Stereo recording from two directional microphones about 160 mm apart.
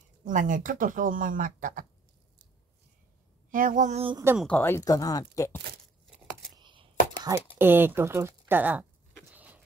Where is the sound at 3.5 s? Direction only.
55° right (ahead or behind).